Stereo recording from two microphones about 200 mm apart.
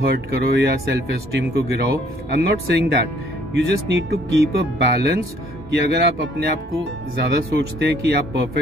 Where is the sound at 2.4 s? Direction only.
50° right (ahead or behind).